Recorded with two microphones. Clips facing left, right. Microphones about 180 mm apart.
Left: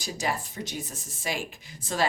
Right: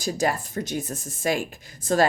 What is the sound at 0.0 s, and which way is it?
A woman's voice, 45° right (ahead or behind).